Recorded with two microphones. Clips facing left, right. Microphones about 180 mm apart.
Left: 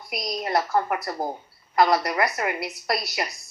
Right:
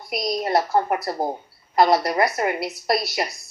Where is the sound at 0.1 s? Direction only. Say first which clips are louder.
Right 4 dB; 25° right (ahead or behind).